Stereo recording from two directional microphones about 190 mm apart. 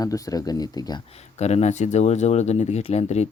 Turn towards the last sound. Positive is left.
turn(degrees=35)  # may be behind; listen again after turning